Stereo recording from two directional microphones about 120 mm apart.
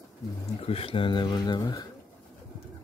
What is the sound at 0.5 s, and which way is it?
Speech, 55° left (ahead or behind).